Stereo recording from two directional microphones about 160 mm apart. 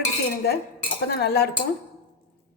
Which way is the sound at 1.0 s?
90° left.